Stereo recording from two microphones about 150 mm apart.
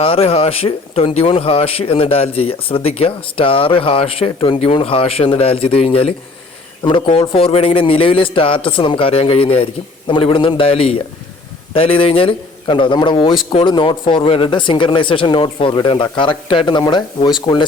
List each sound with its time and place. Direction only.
0.0 s speech: 40° left (ahead or behind)